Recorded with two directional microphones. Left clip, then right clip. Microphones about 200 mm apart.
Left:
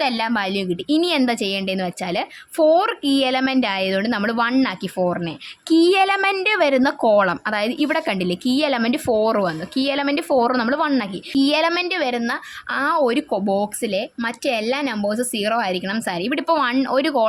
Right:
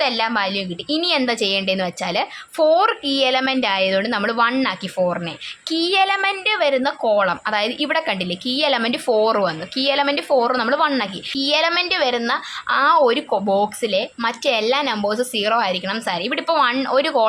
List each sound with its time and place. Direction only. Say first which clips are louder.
0.0 s a woman's voice: right 2 dB; 20° left (ahead or behind)